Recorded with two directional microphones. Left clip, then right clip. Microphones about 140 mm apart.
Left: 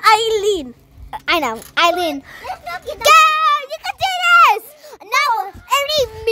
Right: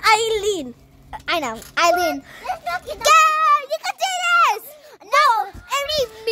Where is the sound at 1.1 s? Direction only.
35° left (ahead or behind).